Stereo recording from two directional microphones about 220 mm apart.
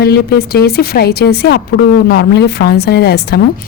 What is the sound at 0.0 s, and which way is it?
Speech, 45° left (ahead or behind).